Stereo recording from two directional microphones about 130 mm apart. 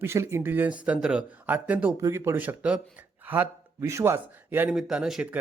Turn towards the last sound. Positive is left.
turn(degrees=-5)  # may be behind; listen again after turning